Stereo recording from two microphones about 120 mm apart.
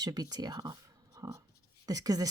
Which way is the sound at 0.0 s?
35° right (ahead or behind).